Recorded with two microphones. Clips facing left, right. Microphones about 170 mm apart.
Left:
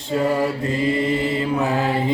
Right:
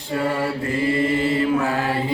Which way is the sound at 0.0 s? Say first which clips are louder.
Left 3 dB; 20° left (ahead or behind).